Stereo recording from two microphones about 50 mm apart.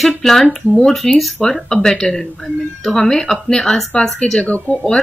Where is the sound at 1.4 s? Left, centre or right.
Centre; by 4.8 s left.